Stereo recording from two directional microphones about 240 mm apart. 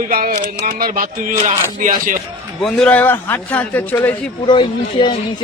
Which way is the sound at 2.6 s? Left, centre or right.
Centre.